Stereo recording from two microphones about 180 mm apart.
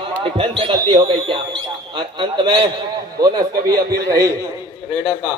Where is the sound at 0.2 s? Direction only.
30° right (ahead or behind).